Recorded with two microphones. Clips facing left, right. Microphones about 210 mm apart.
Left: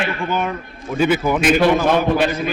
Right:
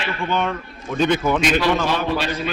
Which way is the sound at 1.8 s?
55° left (ahead or behind).